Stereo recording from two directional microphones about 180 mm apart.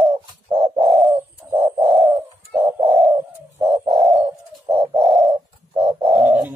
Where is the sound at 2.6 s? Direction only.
30° right (ahead or behind).